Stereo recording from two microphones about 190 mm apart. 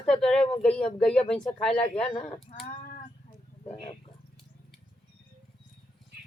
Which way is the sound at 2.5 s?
40° left (ahead or behind).